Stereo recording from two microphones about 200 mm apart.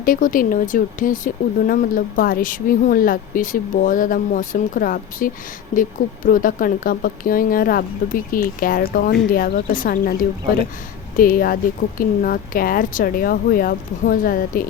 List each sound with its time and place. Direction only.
0.0 s speech: 45° left (ahead or behind)
11.2 s speech: 45° left (ahead or behind)